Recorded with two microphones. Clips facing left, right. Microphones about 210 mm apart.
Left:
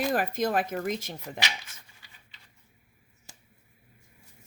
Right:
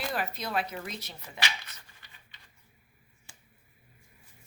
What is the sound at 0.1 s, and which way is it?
Speech, 45° left (ahead or behind).